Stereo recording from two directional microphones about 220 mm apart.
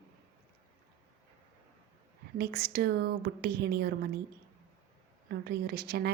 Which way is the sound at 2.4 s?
45° right (ahead or behind).